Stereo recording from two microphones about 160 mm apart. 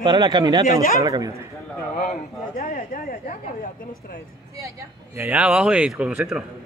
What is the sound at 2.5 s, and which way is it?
Speech, 65° left (ahead or behind).